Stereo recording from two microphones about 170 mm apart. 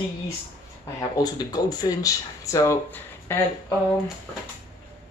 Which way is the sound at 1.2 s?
25° left (ahead or behind).